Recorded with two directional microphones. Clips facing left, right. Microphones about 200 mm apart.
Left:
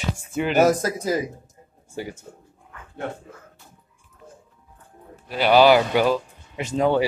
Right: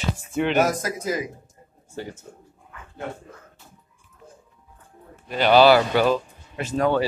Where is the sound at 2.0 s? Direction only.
10° left (ahead or behind).